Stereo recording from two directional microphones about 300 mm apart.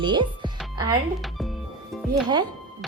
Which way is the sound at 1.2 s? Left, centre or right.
Centre.